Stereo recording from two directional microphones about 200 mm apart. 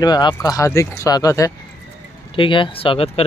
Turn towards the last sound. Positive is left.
turn(degrees=30)  # may be behind; listen again after turning